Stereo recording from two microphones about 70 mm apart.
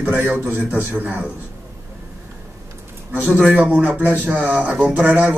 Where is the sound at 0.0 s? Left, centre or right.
Right.